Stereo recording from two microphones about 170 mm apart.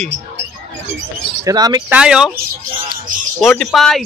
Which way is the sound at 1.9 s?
5° right (ahead or behind).